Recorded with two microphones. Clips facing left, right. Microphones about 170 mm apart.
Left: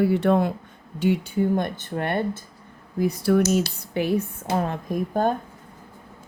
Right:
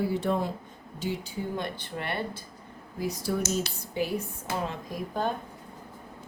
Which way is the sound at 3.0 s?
60° left (ahead or behind).